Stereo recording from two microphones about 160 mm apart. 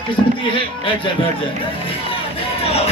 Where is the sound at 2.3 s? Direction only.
40° left (ahead or behind).